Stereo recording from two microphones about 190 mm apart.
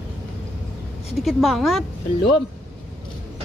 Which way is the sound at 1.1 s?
Centre (ahead or behind).